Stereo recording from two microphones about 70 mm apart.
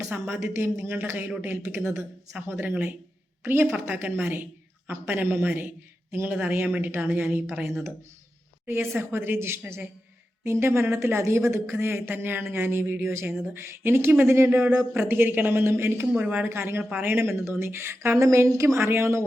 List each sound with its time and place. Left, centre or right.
0.5 s a woman's voice: right
8.6 s speech: right
16.2 s speech: right
16.5 s speech: right
18.8 s speech: right